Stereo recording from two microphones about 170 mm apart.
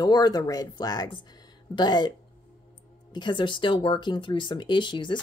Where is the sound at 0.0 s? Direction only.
25° left (ahead or behind).